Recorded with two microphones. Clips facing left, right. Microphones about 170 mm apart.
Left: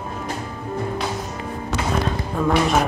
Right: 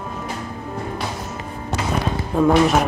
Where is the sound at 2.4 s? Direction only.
15° right (ahead or behind).